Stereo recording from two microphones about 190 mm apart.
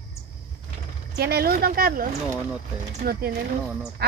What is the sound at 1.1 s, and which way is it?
Speech, 55° right (ahead or behind).